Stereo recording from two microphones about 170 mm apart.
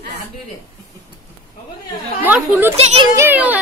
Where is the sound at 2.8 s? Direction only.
40° right (ahead or behind).